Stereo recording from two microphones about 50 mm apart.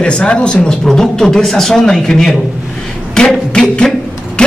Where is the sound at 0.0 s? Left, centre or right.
Centre.